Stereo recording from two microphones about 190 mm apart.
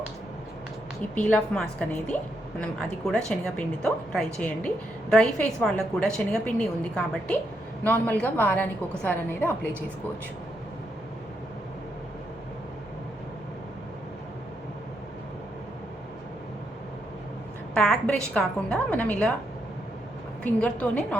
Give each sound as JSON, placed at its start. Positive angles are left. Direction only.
{"t": 1.1, "sound": "a woman's voice", "side_deg": 5}
{"t": 17.7, "sound": "a woman's voice", "side_deg": 5}
{"t": 20.4, "sound": "a woman's voice", "side_deg": 5}